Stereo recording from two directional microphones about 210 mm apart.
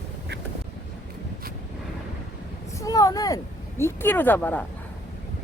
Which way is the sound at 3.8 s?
10° left (ahead or behind).